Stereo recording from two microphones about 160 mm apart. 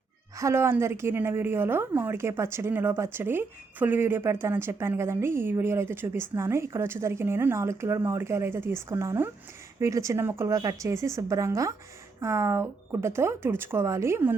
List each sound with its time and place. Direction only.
0.3 s a woman's voice: 15° right (ahead or behind)